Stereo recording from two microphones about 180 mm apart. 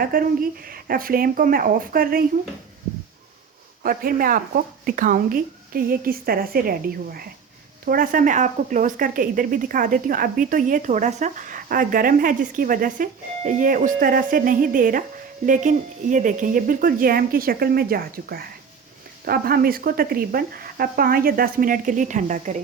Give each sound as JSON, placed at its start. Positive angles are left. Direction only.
{"t": 0.0, "sound": "speech", "side_deg": -50}
{"t": 3.8, "sound": "speech", "side_deg": -50}